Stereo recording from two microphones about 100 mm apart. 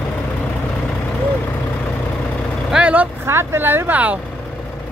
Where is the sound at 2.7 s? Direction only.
10° right (ahead or behind).